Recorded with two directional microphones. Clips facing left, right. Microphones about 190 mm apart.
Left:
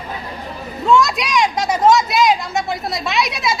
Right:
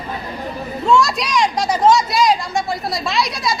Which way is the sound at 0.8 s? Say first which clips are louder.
Left 1 dB; centre (ahead or behind).